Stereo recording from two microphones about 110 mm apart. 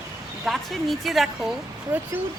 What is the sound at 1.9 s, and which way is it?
Speech, 15° right (ahead or behind).